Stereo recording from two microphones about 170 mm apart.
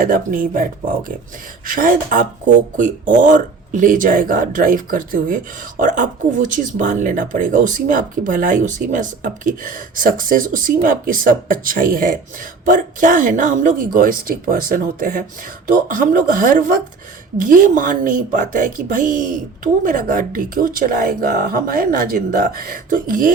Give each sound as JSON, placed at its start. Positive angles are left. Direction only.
{"t": 0.0, "sound": "a woman's voice", "side_deg": -55}